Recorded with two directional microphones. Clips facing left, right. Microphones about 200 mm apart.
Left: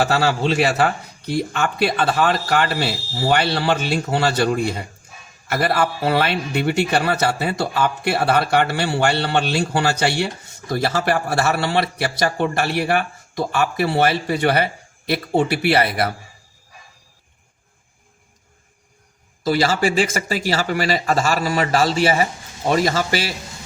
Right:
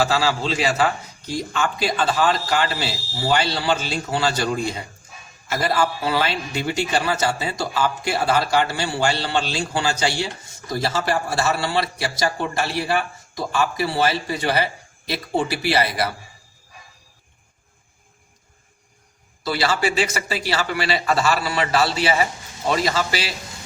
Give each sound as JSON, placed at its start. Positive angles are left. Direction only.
{"t": 0.0, "sound": "a man's voice", "side_deg": 60}
{"t": 19.5, "sound": "speech", "side_deg": 45}